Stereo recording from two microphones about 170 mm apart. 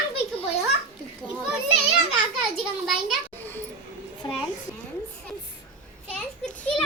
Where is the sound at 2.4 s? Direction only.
Centre (ahead or behind).